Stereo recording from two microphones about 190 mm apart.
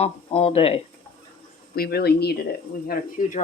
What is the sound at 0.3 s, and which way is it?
Speech, 30° left (ahead or behind).